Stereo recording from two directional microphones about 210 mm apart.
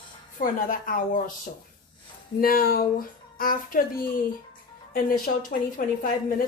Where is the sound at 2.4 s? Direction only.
45° left (ahead or behind).